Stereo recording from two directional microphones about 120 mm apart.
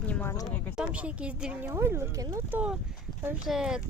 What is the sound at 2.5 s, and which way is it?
Speech, 15° right (ahead or behind).